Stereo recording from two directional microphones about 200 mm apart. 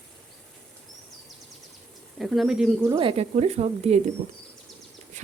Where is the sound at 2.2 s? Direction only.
Centre (ahead or behind).